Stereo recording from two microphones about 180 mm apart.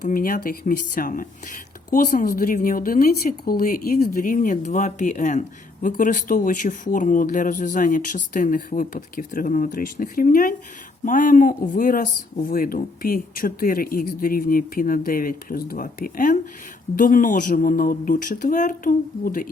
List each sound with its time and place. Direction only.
0.0 s speech: 50° left (ahead or behind)